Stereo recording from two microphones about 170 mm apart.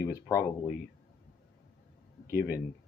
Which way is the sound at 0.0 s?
20° left (ahead or behind).